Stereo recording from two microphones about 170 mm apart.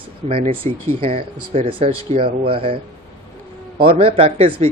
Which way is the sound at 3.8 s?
30° right (ahead or behind).